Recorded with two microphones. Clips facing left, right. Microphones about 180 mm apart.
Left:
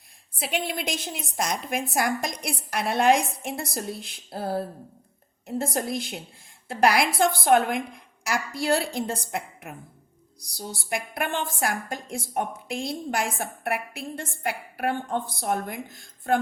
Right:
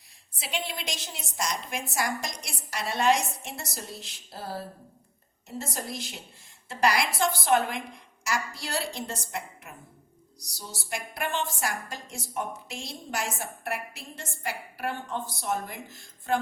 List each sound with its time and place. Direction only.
0.3 s a woman's voice: 55° left (ahead or behind)